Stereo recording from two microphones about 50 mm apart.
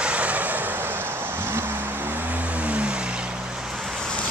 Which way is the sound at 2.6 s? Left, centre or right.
Right.